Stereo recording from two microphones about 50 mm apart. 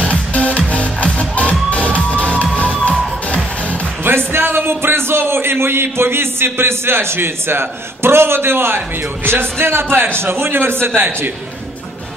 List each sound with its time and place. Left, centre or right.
0.1 s music: left
4.0 s a man's voice: right